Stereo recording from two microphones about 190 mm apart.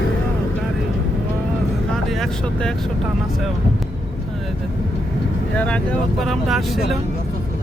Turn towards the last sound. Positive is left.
turn(degrees=0)  # may be behind; listen again after turning